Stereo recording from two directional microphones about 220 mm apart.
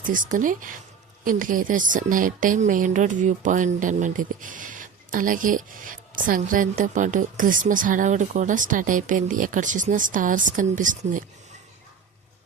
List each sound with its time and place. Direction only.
0.0 s speech: 35° right (ahead or behind)